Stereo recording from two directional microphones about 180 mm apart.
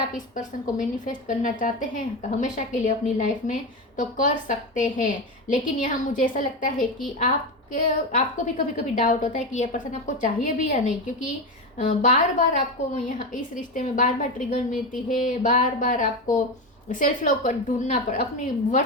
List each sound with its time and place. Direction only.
0.3 s a woman's voice: 45° left (ahead or behind)